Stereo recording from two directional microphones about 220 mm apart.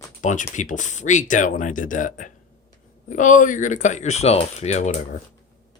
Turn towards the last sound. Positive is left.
turn(degrees=30)  # may be behind; listen again after turning